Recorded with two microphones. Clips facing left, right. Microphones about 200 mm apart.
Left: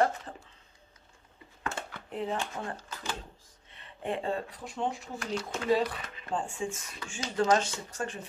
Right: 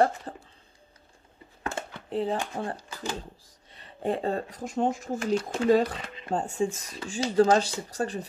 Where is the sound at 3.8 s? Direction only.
40° right (ahead or behind).